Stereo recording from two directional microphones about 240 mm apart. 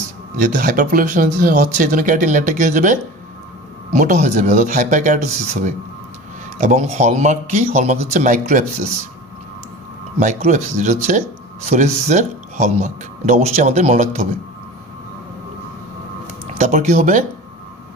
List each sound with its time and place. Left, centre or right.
0.3 s speech: right
10.2 s speech: right
16.6 s speech: right